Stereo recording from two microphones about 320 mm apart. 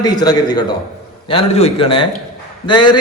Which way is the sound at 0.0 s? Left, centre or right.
Centre.